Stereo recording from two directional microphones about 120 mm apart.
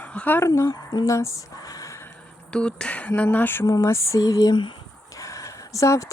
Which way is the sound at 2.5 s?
10° left (ahead or behind).